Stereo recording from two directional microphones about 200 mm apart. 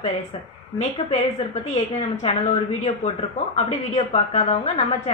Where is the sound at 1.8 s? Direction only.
30° left (ahead or behind).